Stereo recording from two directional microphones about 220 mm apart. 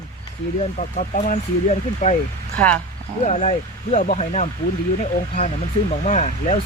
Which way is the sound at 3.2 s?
30° left (ahead or behind).